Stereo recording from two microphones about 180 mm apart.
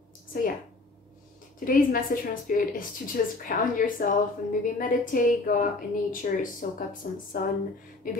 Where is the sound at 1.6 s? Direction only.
50° left (ahead or behind).